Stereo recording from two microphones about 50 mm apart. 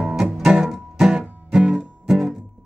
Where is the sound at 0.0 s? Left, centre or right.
Centre.